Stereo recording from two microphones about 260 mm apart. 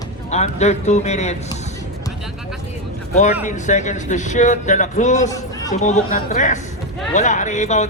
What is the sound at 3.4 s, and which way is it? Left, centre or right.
A man's voice, left.